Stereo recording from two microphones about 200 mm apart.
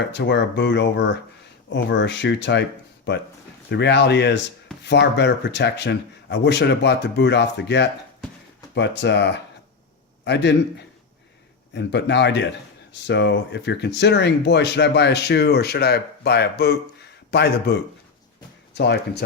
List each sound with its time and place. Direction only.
0.0 s speech: 60° left (ahead or behind)
8.2 s a sound: 5° left (ahead or behind)
8.7 s speech: 60° left (ahead or behind)